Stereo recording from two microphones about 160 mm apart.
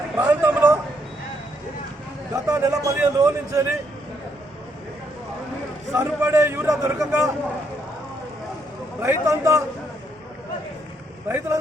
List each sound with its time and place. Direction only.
0.2 s a sound: 15° right (ahead or behind)
2.3 s a man's voice: 20° right (ahead or behind)
5.9 s a man's voice: 15° right (ahead or behind)
9.0 s a man's voice: 15° right (ahead or behind)
11.3 s a man's voice: 15° right (ahead or behind)